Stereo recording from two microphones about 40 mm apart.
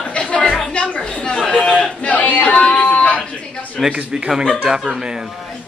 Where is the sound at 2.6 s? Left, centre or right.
Centre.